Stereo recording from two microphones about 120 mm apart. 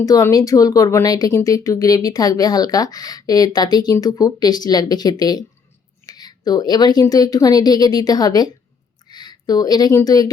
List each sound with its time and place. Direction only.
0.0 s speech: 30° left (ahead or behind)